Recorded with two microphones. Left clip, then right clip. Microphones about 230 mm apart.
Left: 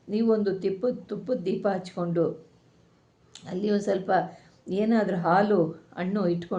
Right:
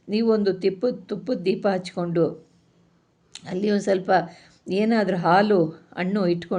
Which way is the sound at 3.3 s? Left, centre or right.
Right.